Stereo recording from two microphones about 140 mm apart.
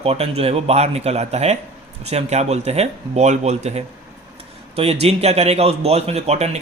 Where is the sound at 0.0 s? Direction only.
45° right (ahead or behind).